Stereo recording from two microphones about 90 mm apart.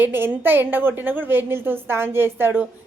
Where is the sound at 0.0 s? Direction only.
25° right (ahead or behind).